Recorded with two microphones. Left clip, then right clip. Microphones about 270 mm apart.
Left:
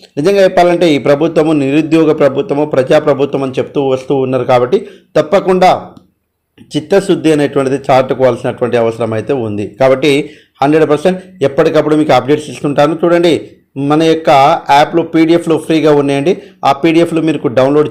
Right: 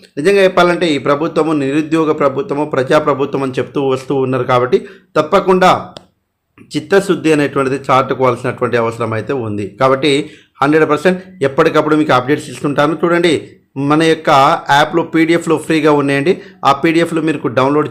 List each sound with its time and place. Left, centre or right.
0.2 s a man's voice: centre